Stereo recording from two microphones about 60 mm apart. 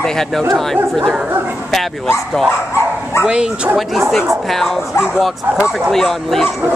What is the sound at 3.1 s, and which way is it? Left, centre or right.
Speech, left.